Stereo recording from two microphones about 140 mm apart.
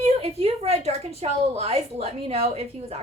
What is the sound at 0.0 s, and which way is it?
A woman's voice, 45° right (ahead or behind).